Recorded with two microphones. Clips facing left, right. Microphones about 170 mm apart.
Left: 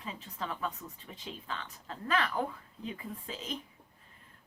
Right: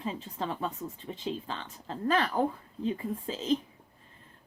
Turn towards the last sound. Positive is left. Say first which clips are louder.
# right 11 dB
turn(degrees=-30)  # may be behind; listen again after turning